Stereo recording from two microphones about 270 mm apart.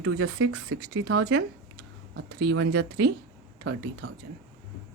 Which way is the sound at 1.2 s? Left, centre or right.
Right.